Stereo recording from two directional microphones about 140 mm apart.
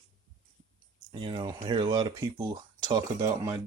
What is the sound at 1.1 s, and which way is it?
Speech, 35° right (ahead or behind).